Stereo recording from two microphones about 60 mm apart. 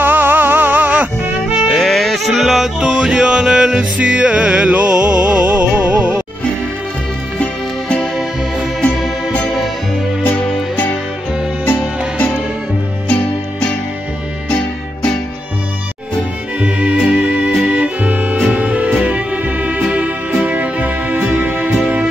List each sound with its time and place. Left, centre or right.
0.0 s music: right
1.8 s music: centre; by 6.1 s right
10.2 s music: left
14.5 s music: left
16.5 s music: right